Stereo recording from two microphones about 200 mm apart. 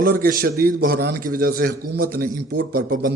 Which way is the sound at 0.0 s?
45° right (ahead or behind).